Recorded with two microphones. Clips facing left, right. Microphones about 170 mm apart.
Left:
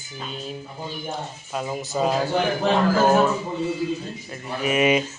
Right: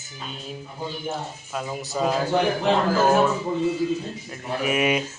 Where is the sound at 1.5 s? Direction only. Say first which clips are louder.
Left 2 dB; 5° left (ahead or behind).